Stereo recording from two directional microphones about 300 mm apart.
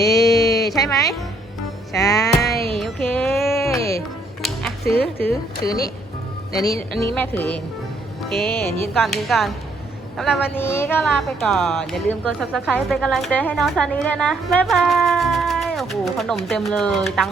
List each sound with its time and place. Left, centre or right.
0.0 s a sound: centre
1.9 s music: centre
2.4 s music: left
2.7 s music: centre
5.6 s music: centre
6.5 s a woman's voice: centre